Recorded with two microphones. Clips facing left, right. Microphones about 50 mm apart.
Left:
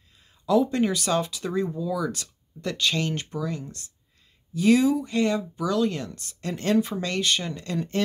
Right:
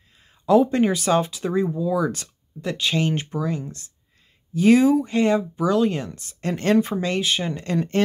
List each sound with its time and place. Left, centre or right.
0.2 s speech: right
2.0 s speech: right
2.2 s speech: centre
6.4 s speech: right
7.0 s speech: centre
7.7 s speech: right